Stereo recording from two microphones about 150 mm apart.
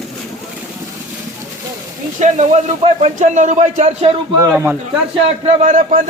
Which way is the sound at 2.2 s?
50° right (ahead or behind).